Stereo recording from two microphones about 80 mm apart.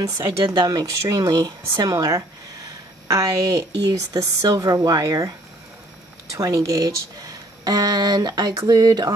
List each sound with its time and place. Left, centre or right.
0.2 s a woman's voice: right
6.3 s speech: right